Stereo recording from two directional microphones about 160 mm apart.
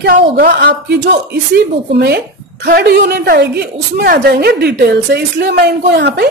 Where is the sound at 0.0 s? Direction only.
80° right.